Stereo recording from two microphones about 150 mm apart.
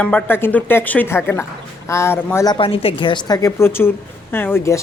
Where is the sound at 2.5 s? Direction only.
35° left (ahead or behind).